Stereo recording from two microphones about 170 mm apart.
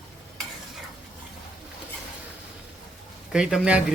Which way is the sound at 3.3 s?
5° right (ahead or behind).